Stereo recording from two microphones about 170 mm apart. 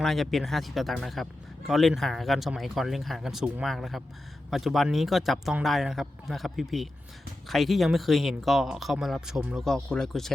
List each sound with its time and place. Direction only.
0.0 s speech: centre (ahead or behind)